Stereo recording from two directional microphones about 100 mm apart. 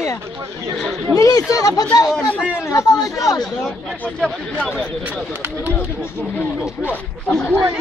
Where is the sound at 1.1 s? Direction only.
35° left (ahead or behind).